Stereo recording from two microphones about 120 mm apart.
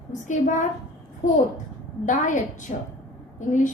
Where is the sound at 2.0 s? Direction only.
90° left.